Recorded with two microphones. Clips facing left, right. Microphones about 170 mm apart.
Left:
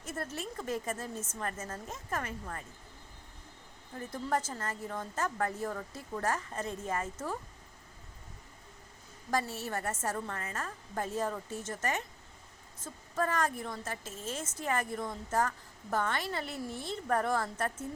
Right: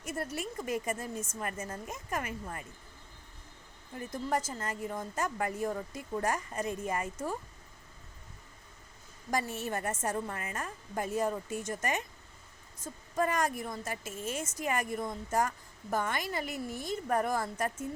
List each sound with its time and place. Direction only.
0.0 s a woman's voice: 10° right (ahead or behind)
3.9 s a woman's voice: 15° right (ahead or behind)
9.3 s a woman's voice: 15° right (ahead or behind)